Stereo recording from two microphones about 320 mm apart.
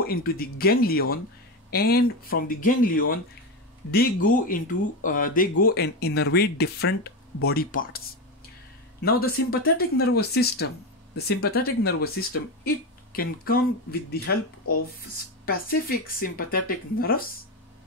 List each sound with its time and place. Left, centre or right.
0.0 s speech: left
9.0 s speech: left
15.4 s speech: left